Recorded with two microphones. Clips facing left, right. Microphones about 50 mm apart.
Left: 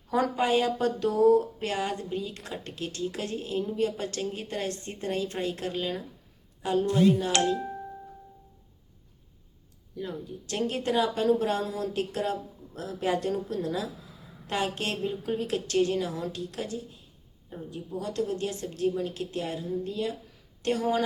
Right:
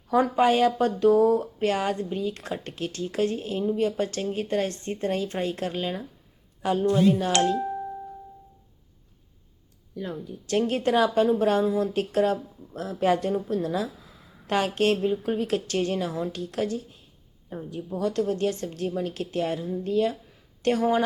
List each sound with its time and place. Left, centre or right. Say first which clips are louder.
0.1 s a woman's voice: right 4 dB; right
10.0 s a woman's voice: right 2 dB; right
11.9 s a woman's voice: right 6 dB; right
17.9 s a woman's voice: right 5 dB; right